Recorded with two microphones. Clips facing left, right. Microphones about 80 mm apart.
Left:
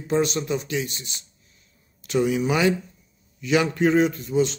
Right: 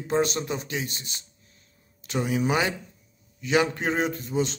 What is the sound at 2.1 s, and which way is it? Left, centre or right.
A man's voice, right.